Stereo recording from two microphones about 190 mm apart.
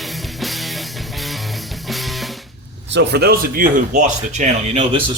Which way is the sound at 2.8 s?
65° right (ahead or behind).